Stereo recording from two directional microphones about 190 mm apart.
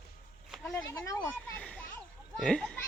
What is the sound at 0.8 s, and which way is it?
A child's voice, 15° left (ahead or behind).